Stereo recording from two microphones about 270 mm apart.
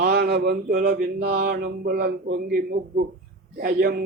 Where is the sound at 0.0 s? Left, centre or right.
Right.